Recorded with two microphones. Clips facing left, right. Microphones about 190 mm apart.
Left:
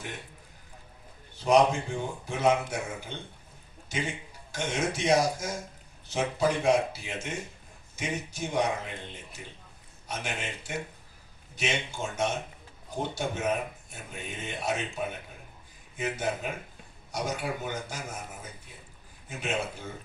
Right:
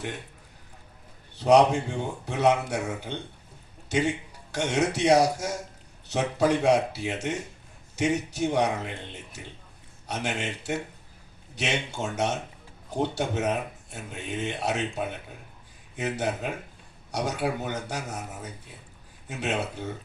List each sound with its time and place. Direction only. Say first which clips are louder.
1.4 s a man's voice: right 3 dB; 70° right (ahead or behind)
10.1 s speech: right 5 dB; 70° right (ahead or behind)
16.0 s speech: right 2 dB; 70° right (ahead or behind)